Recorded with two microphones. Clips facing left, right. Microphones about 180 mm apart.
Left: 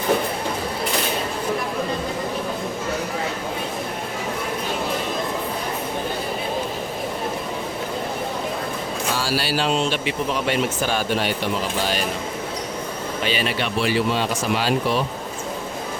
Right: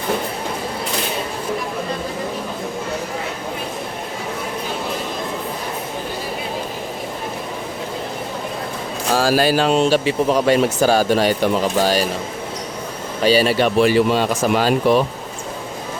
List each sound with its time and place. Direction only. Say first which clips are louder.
9.3 s speech: right 6 dB; 45° right (ahead or behind)
10.1 s speech: right 7 dB; 40° right (ahead or behind)
13.2 s speech: right 10 dB; 40° right (ahead or behind)